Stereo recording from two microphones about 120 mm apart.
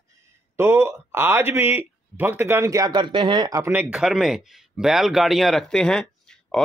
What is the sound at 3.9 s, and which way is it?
A man's voice, 5° right (ahead or behind).